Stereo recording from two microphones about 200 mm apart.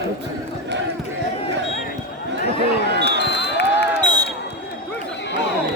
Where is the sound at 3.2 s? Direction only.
60° left (ahead or behind).